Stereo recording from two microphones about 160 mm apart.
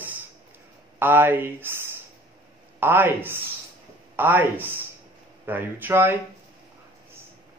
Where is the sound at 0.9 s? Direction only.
15° right (ahead or behind).